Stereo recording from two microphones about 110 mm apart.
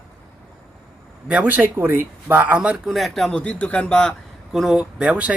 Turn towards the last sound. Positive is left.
turn(degrees=-10)  # may be behind; listen again after turning